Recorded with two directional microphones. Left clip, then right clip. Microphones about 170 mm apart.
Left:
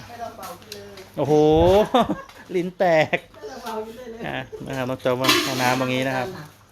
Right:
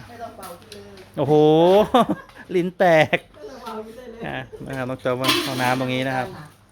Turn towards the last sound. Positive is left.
turn(degrees=-5)  # may be behind; listen again after turning